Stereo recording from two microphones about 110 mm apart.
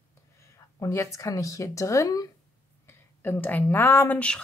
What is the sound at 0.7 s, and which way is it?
Speech, 30° left (ahead or behind).